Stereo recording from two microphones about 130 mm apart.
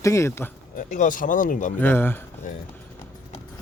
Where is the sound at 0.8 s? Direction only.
80° left.